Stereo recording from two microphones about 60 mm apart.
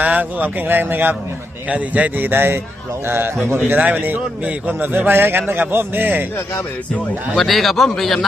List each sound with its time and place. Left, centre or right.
0.0 s a man's voice: right
3.7 s a man's voice: right
7.3 s a man's voice: centre